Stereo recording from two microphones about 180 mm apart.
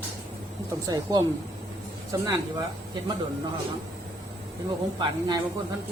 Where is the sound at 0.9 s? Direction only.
20° right (ahead or behind).